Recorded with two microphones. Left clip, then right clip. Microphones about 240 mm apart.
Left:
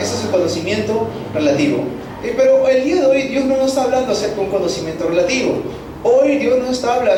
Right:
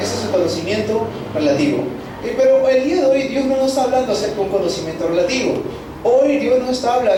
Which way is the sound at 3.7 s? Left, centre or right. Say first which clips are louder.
Even; centre.